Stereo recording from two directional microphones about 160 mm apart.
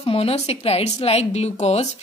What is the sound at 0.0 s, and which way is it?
Speech, 35° left (ahead or behind).